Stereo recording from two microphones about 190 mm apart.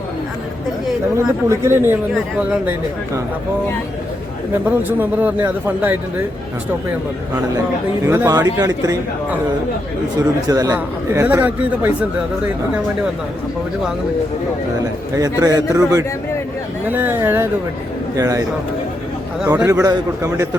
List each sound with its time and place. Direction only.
1.1 s speech: 15° right (ahead or behind)
4.6 s speech: 10° right (ahead or behind)
8.0 s speech: 15° right (ahead or behind)
10.5 s speech: 20° right (ahead or behind)
15.1 s speech: 15° right (ahead or behind)
19.5 s speech: 15° right (ahead or behind)